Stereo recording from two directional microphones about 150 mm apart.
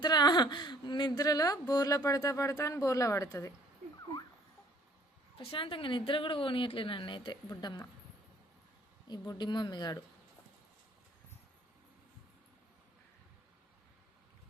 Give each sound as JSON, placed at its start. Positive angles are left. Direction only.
{"t": 0.0, "sound": "speech", "side_deg": 30}
{"t": 5.4, "sound": "speech", "side_deg": 40}
{"t": 9.0, "sound": "speech", "side_deg": 25}